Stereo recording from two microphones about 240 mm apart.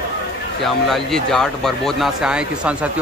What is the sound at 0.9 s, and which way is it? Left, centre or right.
Speech, centre.